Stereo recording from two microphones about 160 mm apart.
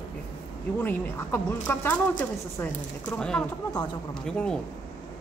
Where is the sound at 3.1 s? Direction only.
5° left (ahead or behind).